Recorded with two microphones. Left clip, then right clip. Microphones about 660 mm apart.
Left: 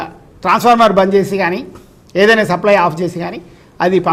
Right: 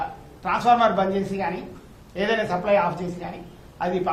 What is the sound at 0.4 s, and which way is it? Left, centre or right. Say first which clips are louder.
A man's voice: left 9 dB; left.